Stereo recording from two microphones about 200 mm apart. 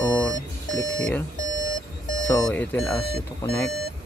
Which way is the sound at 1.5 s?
70° left (ahead or behind).